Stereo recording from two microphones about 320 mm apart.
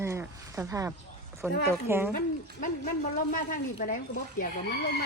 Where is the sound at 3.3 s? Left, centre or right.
Left.